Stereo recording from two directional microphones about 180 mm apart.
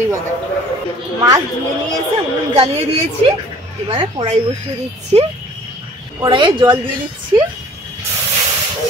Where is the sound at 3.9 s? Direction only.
30° right (ahead or behind).